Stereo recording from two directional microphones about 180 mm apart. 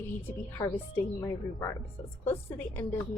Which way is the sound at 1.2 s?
15° left (ahead or behind).